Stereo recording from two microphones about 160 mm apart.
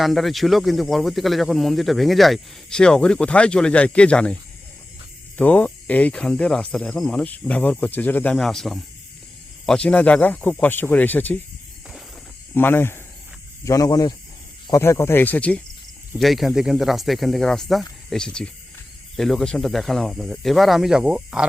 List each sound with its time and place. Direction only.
0.0 s speech: centre (ahead or behind)
5.4 s speech: 10° left (ahead or behind)
12.5 s speech: 15° left (ahead or behind); by 21.4 s 5° right (ahead or behind)